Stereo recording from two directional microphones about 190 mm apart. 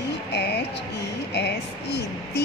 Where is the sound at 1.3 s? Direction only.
60° left (ahead or behind).